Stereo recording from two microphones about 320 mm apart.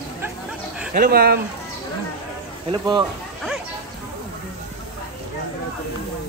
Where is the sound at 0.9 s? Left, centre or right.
Right.